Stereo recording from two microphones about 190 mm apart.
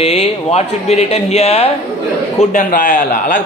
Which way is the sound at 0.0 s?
35° left (ahead or behind).